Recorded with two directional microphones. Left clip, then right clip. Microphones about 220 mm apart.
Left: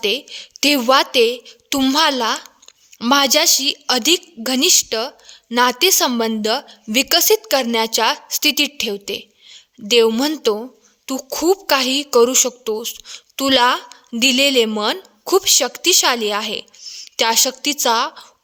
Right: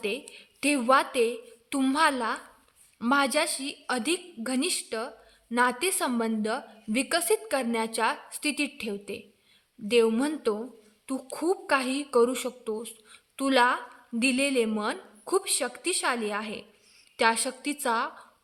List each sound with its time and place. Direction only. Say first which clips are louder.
0.0 s a woman's voice: left 12 dB; 50° left (ahead or behind)